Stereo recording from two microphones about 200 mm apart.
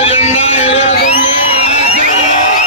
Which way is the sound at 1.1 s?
30° left (ahead or behind).